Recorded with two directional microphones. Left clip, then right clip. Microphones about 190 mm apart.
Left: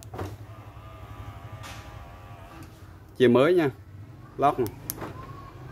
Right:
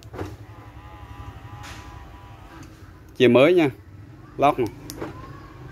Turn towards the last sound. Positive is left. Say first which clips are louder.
# right 4 dB
turn(degrees=20)  # may be behind; listen again after turning